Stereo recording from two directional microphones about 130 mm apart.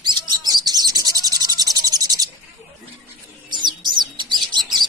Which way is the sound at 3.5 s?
35° right (ahead or behind).